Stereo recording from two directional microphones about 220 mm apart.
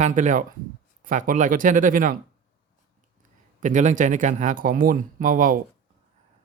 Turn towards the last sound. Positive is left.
turn(degrees=-35)  # may be behind; listen again after turning